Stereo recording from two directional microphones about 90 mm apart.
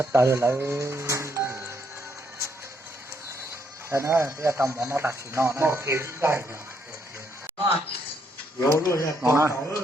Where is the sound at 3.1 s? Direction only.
30° right (ahead or behind).